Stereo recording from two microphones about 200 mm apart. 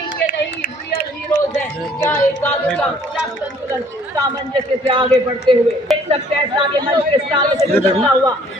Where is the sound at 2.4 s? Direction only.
10° left (ahead or behind).